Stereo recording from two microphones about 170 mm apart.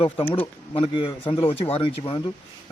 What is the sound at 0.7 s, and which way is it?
A man's voice, 30° left (ahead or behind).